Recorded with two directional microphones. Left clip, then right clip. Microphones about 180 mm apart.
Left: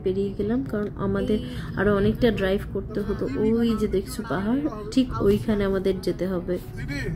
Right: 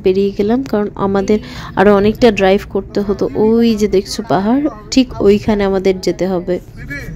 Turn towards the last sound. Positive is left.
turn(degrees=-40)  # may be behind; listen again after turning